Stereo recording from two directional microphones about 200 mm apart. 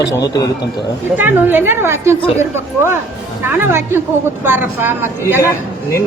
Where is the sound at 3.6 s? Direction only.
10° right (ahead or behind).